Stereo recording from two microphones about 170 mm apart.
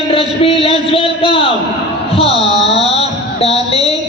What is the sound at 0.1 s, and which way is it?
A man's voice, 35° left (ahead or behind).